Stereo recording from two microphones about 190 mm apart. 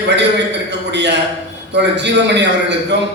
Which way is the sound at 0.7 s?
65° right (ahead or behind).